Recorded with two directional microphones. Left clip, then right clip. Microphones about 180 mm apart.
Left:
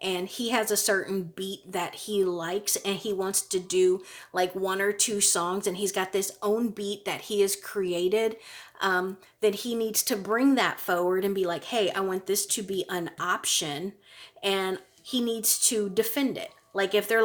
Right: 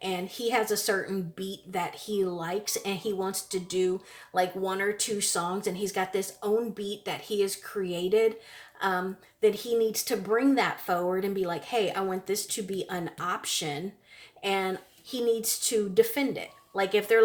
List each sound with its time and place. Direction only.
0.0 s speech: 40° left (ahead or behind)